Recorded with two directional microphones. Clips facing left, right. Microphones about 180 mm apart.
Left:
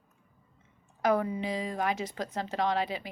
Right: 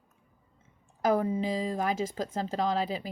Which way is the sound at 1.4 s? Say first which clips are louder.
Right 2 dB; 35° right (ahead or behind).